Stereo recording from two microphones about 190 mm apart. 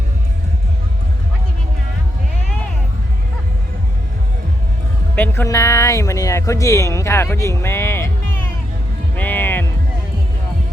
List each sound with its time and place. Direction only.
5.1 s speech: 10° left (ahead or behind)
9.1 s music: 10° left (ahead or behind)